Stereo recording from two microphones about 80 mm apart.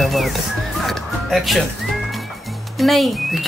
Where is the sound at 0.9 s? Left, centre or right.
Centre.